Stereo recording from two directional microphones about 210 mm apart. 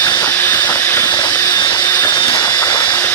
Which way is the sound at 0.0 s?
15° left (ahead or behind).